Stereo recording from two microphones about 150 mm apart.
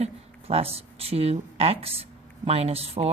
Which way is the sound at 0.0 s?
40° right (ahead or behind).